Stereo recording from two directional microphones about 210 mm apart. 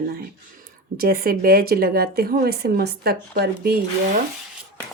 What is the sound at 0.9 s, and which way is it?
Speech, 45° right (ahead or behind).